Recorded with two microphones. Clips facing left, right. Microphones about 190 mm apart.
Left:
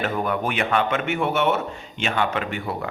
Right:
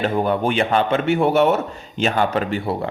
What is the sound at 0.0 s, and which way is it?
Speech, 30° right (ahead or behind).